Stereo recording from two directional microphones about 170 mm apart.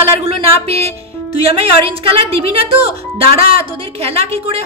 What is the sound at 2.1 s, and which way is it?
A woman's voice, 35° right (ahead or behind).